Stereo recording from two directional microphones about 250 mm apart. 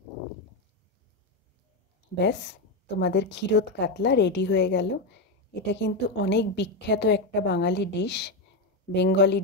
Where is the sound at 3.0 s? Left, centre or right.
Left.